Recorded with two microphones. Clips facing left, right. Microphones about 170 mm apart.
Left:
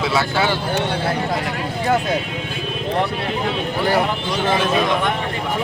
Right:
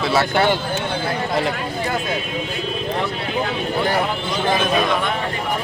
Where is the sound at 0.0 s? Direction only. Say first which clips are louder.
Right 1 dB; centre (ahead or behind).